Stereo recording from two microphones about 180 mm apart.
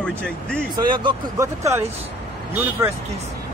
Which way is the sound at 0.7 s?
25° right (ahead or behind).